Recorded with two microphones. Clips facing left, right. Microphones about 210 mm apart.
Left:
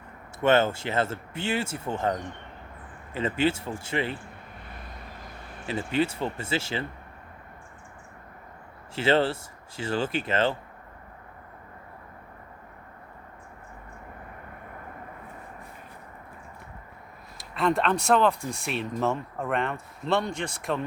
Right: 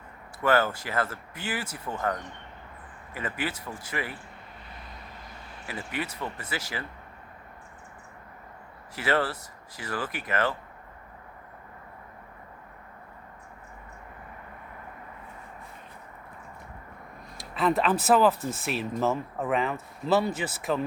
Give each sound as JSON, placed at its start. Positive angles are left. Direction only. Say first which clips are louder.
{"t": 0.4, "sound": "speech", "louder": "left 3 dB", "side_deg": 25}
{"t": 5.6, "sound": "speech", "louder": "left 8 dB", "side_deg": 25}
{"t": 9.0, "sound": "speech", "louder": "left 4 dB", "side_deg": 25}
{"t": 17.3, "sound": "speech", "louder": "even", "side_deg": 0}